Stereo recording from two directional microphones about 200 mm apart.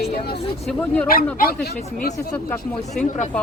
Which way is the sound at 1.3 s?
50° left (ahead or behind).